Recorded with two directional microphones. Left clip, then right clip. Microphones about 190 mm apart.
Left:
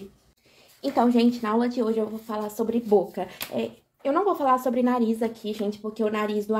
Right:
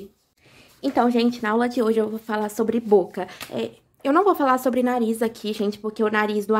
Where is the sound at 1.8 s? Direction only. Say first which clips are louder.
Right 5 dB; 55° right (ahead or behind).